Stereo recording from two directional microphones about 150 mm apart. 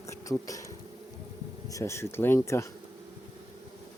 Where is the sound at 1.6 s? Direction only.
20° left (ahead or behind).